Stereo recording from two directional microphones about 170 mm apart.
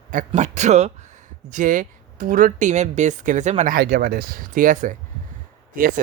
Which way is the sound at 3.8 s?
65° right (ahead or behind).